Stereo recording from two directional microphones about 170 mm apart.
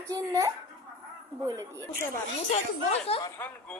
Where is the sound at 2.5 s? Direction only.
35° left (ahead or behind).